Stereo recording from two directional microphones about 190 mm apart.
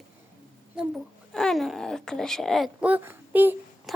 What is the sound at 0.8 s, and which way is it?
Speech, centre (ahead or behind).